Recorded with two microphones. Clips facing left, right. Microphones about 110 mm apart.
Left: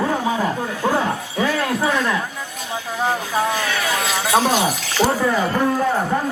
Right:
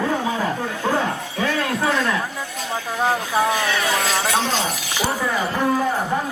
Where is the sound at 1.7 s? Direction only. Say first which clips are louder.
Left 1 dB; centre (ahead or behind).